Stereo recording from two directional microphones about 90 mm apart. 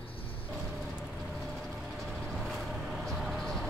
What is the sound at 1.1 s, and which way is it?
Vehicle, centre (ahead or behind).